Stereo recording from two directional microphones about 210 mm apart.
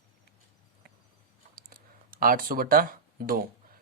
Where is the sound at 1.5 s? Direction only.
45° right (ahead or behind).